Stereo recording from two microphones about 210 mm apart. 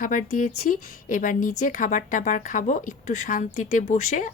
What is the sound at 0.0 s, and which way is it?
A woman's voice, 40° left (ahead or behind).